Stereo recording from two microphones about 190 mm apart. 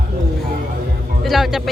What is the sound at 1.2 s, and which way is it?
Speech, centre (ahead or behind).